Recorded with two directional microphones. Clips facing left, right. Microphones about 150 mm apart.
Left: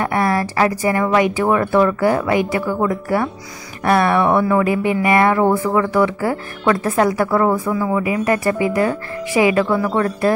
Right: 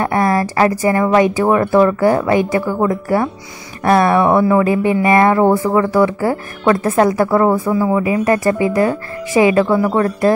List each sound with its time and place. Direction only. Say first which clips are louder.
0.0 s a woman's voice: right 3 dB; 40° right (ahead or behind)